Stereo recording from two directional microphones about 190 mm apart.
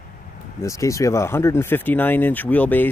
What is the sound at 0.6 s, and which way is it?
Speech, 15° left (ahead or behind).